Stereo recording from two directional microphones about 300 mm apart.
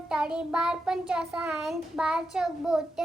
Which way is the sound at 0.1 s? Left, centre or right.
Centre.